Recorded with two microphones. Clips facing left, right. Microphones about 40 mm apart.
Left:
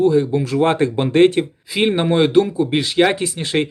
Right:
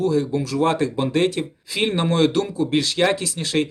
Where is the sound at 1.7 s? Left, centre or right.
Centre.